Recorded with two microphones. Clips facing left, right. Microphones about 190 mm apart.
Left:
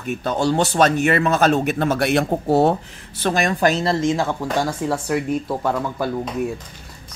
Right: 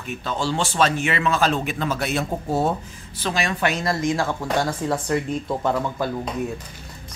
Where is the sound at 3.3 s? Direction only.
45° left (ahead or behind).